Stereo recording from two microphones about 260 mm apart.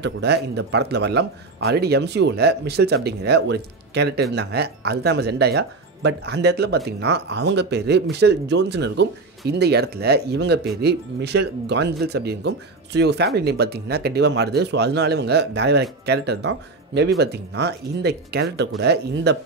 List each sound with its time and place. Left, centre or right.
0.0 s speech: right